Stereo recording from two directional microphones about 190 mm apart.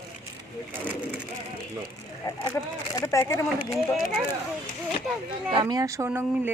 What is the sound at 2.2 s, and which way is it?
Speech, 20° left (ahead or behind).